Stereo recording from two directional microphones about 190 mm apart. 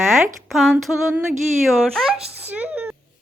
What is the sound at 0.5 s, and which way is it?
Speech, centre (ahead or behind).